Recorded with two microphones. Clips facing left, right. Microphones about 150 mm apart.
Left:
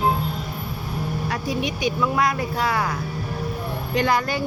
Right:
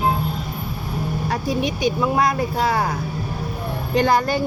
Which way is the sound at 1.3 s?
35° right (ahead or behind).